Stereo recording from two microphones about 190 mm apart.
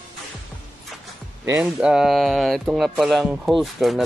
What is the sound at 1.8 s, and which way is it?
Speech, 5° right (ahead or behind).